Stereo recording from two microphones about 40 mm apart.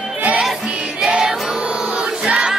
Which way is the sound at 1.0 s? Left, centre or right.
Centre.